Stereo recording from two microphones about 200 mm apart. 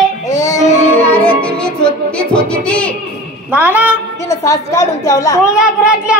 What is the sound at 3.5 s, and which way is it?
Speech, 10° right (ahead or behind).